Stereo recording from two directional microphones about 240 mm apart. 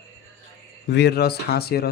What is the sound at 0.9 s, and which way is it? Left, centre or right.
Speech, left.